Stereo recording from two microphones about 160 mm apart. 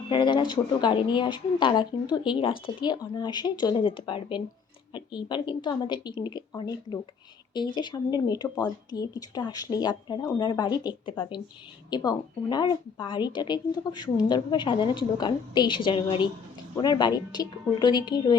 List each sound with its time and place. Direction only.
0.1 s a woman's voice: 30° left (ahead or behind)